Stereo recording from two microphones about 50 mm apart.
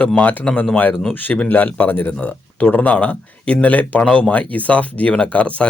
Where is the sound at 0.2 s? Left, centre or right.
Left.